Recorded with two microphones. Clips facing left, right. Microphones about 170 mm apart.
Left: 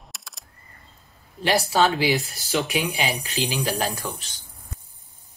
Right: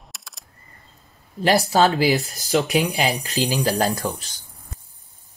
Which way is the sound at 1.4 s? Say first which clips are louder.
Right 3 dB; 40° right (ahead or behind).